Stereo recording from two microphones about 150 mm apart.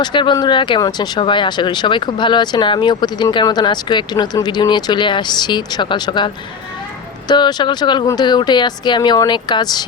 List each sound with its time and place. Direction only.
0.0 s speech: 30° left (ahead or behind)